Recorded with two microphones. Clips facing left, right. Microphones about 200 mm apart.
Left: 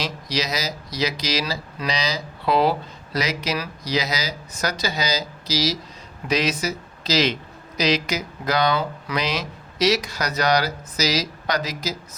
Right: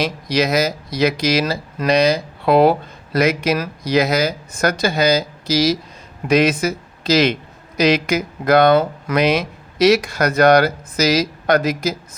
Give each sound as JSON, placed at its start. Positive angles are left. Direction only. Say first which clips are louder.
{"t": 0.0, "sound": "speech", "louder": "right 8 dB", "side_deg": -55}